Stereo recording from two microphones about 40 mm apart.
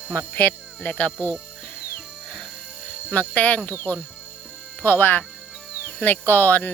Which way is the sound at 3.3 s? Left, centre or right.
Left.